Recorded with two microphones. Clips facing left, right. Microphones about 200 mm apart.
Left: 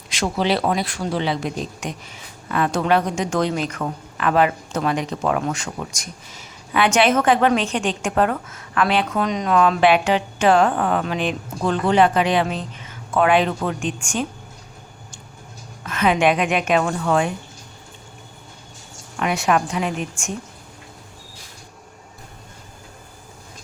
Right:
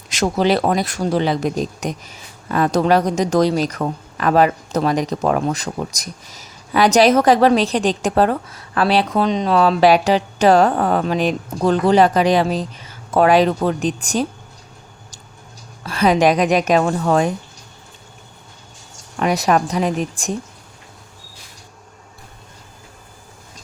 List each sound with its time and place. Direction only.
0.1 s speech: 45° right (ahead or behind)
15.8 s speech: 35° right (ahead or behind)
19.2 s speech: 40° right (ahead or behind)